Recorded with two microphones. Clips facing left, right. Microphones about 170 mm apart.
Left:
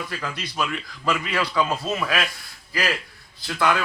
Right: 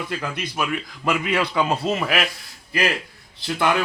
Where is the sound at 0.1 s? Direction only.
20° right (ahead or behind).